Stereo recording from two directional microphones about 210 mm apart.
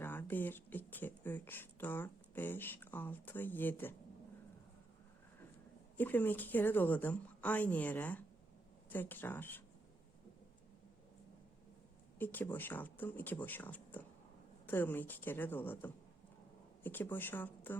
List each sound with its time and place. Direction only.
0.0 s a sound: 10° left (ahead or behind)
6.0 s a woman's voice: 10° left (ahead or behind)
12.2 s a woman's voice: 10° left (ahead or behind)